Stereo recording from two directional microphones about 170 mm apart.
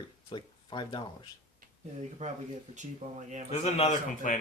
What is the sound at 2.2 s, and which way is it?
Speech, 45° right (ahead or behind).